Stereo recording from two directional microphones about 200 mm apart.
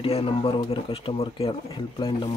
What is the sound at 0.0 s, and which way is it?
Speech, 30° left (ahead or behind).